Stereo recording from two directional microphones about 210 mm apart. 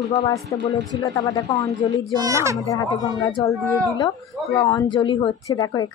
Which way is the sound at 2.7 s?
15° left (ahead or behind).